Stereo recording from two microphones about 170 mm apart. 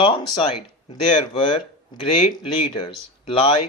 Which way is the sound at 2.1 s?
30° left (ahead or behind).